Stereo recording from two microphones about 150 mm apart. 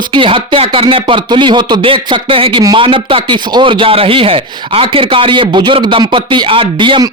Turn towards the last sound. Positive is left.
turn(degrees=-30)  # may be behind; listen again after turning